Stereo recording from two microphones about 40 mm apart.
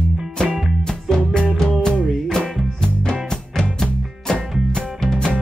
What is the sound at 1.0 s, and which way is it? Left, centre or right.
Music, centre.